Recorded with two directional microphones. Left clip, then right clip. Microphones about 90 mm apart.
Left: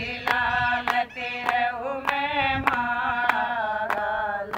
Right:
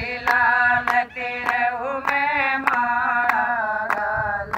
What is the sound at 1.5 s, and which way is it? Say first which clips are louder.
Singing: right 3 dB; 25° right (ahead or behind).